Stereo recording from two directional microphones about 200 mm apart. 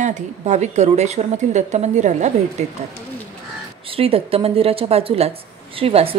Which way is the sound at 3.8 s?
30° right (ahead or behind).